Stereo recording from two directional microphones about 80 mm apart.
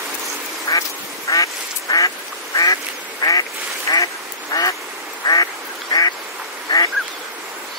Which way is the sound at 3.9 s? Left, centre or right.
Left.